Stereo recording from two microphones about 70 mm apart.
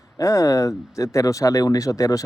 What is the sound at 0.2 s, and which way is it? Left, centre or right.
Speech, left.